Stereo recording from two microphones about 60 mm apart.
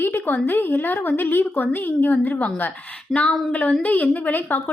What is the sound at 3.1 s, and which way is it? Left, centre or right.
Speech, centre.